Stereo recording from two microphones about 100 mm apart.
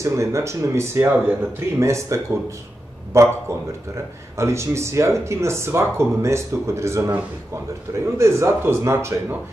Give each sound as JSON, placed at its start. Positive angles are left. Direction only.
{"t": 0.0, "sound": "speech", "side_deg": -30}